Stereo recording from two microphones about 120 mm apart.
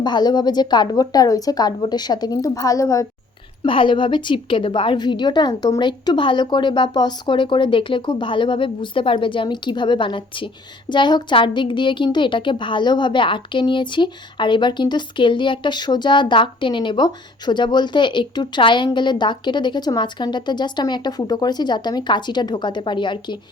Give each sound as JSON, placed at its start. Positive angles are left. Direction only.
{"t": 0.0, "sound": "a woman's voice", "side_deg": 35}
{"t": 3.6, "sound": "a woman's voice", "side_deg": 45}